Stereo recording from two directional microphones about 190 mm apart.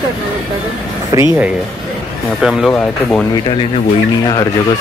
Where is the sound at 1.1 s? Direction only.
15° right (ahead or behind).